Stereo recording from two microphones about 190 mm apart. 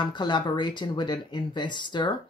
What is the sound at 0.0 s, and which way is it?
Speech, 25° left (ahead or behind).